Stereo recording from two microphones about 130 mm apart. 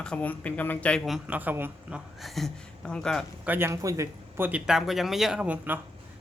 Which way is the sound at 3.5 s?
20° right (ahead or behind).